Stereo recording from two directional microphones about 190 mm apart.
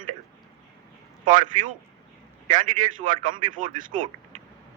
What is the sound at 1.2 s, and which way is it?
Speech, 40° right (ahead or behind).